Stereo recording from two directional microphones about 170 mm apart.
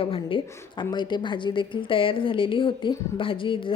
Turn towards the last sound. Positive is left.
turn(degrees=30)  # may be behind; listen again after turning